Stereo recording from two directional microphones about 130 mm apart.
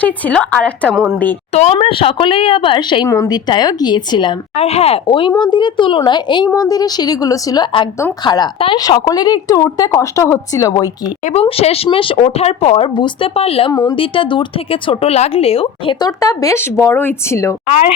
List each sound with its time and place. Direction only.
0.0 s a woman's voice: 10° left (ahead or behind)
1.5 s a woman's voice: 60° left (ahead or behind)
1.9 s speech: 40° left (ahead or behind)
3.1 s a woman's voice: 20° left (ahead or behind)
3.3 s speech: 30° left (ahead or behind)
4.5 s a woman's voice: 50° left (ahead or behind); by 10.8 s 25° left (ahead or behind)
11.4 s speech: 50° left (ahead or behind)
12.9 s a woman's voice: 40° left (ahead or behind); by 17.5 s 20° left (ahead or behind)